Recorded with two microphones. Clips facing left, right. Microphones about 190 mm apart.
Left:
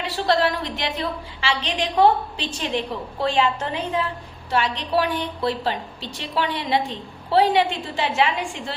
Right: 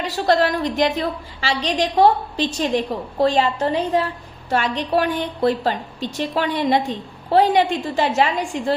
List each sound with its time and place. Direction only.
0.0 s a woman's voice: 45° right (ahead or behind)